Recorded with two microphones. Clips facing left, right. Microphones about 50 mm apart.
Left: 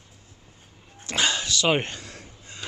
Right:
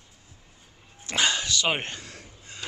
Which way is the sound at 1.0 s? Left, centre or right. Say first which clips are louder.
Even; centre.